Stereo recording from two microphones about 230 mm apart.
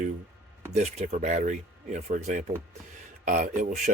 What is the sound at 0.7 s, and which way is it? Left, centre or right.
Speech, right.